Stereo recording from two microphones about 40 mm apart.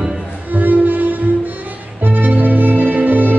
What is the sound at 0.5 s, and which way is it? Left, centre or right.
Violin, right.